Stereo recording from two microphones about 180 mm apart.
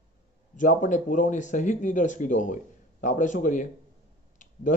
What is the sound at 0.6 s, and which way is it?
A man's voice, 45° left (ahead or behind).